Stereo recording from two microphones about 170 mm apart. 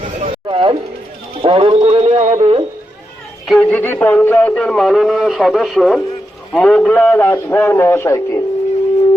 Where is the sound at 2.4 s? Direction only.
30° right (ahead or behind).